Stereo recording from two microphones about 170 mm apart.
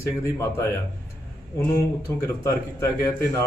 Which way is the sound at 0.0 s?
15° left (ahead or behind).